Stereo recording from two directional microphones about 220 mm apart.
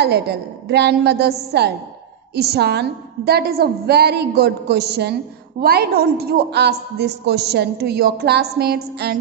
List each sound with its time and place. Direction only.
0.0 s a man's voice: 45° right (ahead or behind)